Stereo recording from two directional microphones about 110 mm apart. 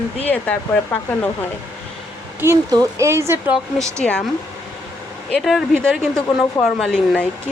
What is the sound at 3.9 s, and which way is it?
Speech, 10° left (ahead or behind).